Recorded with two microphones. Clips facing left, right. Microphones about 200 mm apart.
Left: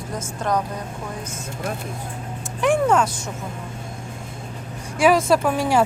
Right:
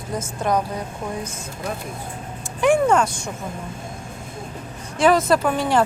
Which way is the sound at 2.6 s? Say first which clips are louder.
Right 1 dB; 5° left (ahead or behind).